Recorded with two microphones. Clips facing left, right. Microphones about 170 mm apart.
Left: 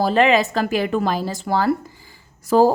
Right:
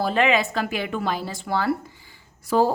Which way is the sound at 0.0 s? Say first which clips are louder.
Left 5 dB; 35° left (ahead or behind).